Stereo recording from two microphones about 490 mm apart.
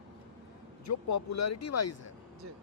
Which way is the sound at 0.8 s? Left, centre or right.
Left.